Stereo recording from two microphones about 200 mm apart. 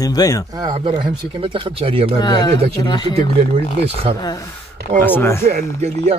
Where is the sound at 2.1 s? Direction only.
20° left (ahead or behind).